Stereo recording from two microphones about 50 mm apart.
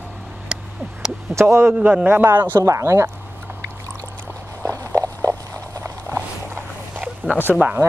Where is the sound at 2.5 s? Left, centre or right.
Right.